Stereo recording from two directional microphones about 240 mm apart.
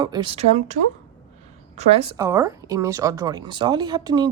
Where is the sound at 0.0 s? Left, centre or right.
Centre.